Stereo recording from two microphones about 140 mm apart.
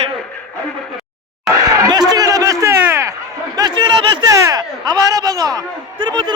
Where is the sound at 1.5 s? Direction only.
25° right (ahead or behind).